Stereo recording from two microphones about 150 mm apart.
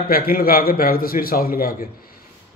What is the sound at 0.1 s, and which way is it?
A man's voice, 75° left (ahead or behind).